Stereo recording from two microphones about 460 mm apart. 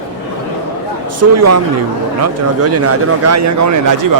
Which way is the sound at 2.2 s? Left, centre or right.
Right.